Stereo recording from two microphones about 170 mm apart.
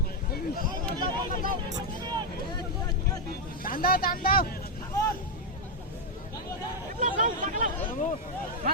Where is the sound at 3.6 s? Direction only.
60° left (ahead or behind).